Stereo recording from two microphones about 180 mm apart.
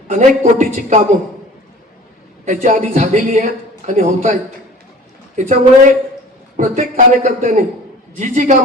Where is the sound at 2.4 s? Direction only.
45° right (ahead or behind).